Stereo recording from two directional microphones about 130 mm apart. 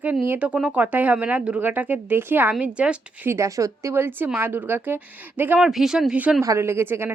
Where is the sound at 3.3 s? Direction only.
25° right (ahead or behind).